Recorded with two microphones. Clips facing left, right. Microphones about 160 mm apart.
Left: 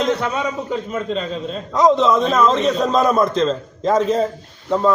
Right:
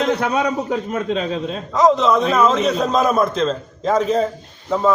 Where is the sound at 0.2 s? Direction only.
80° right.